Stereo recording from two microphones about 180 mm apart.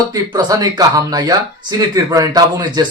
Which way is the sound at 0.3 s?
20° right (ahead or behind).